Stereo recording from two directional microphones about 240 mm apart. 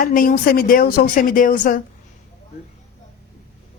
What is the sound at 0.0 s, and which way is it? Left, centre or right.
Speech, left.